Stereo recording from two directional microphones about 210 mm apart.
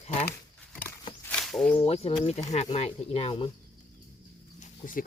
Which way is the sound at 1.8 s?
30° left (ahead or behind).